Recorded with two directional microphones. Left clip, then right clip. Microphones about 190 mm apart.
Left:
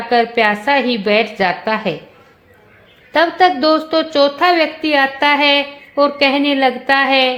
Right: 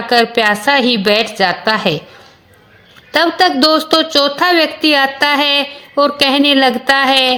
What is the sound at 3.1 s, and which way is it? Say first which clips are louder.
A woman's voice: even; 20° right (ahead or behind).